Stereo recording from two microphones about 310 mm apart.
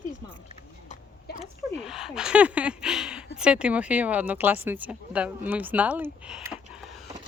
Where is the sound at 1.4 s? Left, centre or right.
Centre.